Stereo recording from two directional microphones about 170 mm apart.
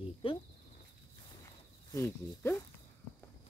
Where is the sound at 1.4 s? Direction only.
15° left (ahead or behind).